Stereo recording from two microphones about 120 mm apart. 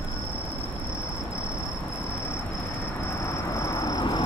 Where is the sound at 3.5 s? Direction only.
25° left (ahead or behind).